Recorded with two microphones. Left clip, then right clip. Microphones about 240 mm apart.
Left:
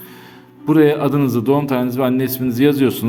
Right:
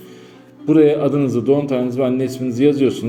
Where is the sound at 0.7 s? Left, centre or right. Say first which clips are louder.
Right 1 dB; left.